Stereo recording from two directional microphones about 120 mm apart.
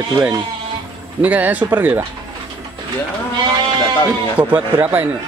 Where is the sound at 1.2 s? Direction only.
15° right (ahead or behind).